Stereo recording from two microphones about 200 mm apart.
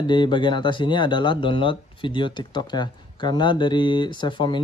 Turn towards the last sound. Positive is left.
turn(degrees=25)  # may be behind; listen again after turning